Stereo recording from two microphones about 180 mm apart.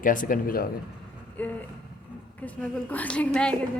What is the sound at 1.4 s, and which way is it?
A woman's voice, 10° left (ahead or behind).